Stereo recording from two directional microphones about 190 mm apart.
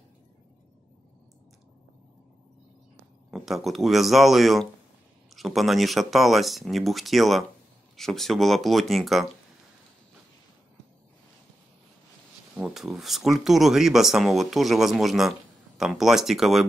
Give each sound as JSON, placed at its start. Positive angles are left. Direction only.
{"t": 3.3, "sound": "speech", "side_deg": 0}
{"t": 12.5, "sound": "speech", "side_deg": 0}